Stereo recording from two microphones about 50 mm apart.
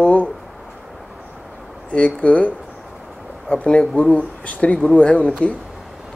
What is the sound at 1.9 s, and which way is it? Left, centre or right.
Speech, left.